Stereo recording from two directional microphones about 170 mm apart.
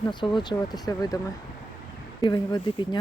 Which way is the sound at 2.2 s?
25° left (ahead or behind).